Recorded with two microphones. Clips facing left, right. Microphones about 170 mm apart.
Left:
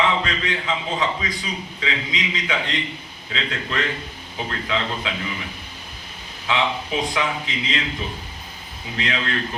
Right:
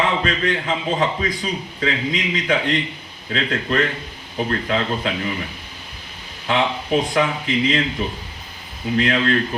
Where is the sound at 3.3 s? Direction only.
50° right (ahead or behind).